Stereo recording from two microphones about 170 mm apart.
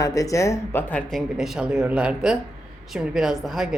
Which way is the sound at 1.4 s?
5° right (ahead or behind).